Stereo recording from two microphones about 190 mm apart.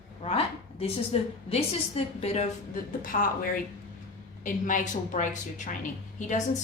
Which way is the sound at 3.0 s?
45° left (ahead or behind).